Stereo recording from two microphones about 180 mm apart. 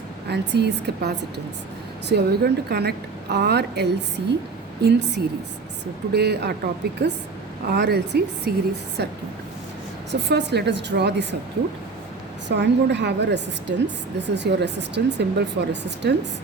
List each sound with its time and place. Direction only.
0.3 s a woman's voice: 65° right (ahead or behind)
12.5 s a woman's voice: 70° right (ahead or behind)